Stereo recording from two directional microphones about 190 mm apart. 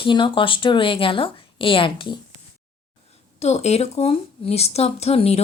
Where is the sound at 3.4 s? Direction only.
35° left (ahead or behind).